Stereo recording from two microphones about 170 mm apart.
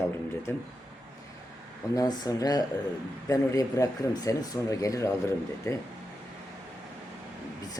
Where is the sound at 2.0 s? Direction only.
25° left (ahead or behind).